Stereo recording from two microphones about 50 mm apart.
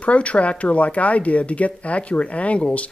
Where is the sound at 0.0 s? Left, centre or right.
Left.